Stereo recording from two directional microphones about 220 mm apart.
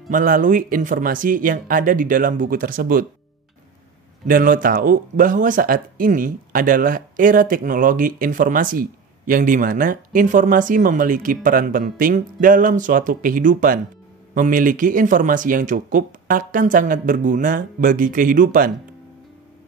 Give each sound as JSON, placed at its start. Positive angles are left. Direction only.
{"t": 0.1, "sound": "speech", "side_deg": -35}
{"t": 4.3, "sound": "speech", "side_deg": -40}